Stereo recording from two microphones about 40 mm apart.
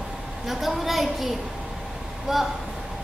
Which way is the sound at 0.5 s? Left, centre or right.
Centre.